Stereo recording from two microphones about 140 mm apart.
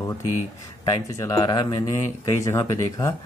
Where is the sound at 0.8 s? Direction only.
25° left (ahead or behind).